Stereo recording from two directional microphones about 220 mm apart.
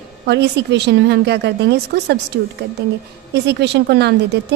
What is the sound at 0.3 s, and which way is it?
A woman's voice, 50° right (ahead or behind).